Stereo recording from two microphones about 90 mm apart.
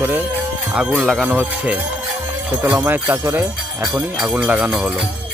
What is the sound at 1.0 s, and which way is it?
Speech, 5° left (ahead or behind).